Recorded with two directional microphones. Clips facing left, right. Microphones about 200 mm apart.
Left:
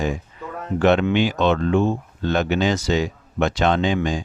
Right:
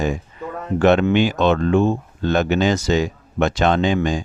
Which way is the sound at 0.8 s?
45° right (ahead or behind).